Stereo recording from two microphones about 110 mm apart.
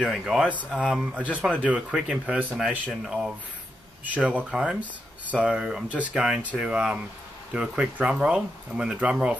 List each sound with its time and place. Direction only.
0.0 s speech: 5° right (ahead or behind)
0.5 s speech: 15° left (ahead or behind)
0.7 s speech: 5° right (ahead or behind)